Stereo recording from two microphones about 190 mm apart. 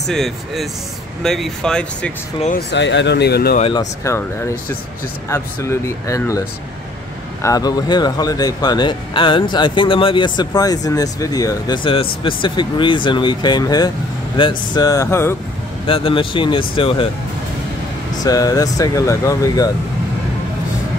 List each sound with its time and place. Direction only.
0.0 s speech: centre (ahead or behind)
2.7 s speech: 70° left (ahead or behind)
3.7 s speech: 15° left (ahead or behind)
7.4 s speech: 20° left (ahead or behind)
15.9 s speech: 30° left (ahead or behind)
18.2 s speech: 20° left (ahead or behind)